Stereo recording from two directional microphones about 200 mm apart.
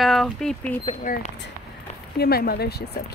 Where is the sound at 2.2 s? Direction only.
50° left (ahead or behind).